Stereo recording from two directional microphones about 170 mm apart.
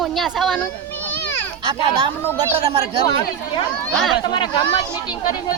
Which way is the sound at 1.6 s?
25° right (ahead or behind).